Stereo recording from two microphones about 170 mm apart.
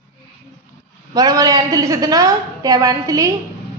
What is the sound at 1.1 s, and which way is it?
A woman's voice, 20° right (ahead or behind).